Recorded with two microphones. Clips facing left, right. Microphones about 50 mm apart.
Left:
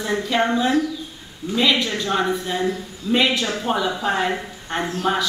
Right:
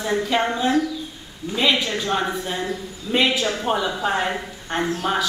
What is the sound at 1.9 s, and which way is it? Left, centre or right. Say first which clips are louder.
A woman's voice: left 2 dB; centre.